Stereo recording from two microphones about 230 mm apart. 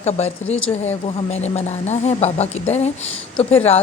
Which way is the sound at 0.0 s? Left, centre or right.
Left.